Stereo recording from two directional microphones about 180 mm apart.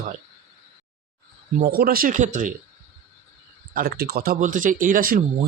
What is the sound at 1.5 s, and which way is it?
Speech, 55° right (ahead or behind).